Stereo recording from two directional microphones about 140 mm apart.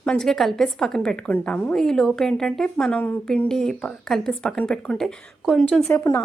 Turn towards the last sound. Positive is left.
turn(degrees=15)  # may be behind; listen again after turning